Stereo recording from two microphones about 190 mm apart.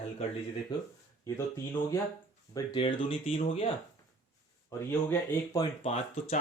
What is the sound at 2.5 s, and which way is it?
Speech, 25° left (ahead or behind).